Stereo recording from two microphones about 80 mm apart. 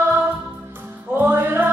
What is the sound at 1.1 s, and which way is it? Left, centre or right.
Music, right.